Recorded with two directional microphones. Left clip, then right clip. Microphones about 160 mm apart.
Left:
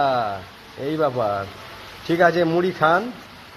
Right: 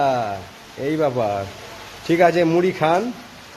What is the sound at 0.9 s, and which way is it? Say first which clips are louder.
A man's voice: right 1 dB; 20° right (ahead or behind).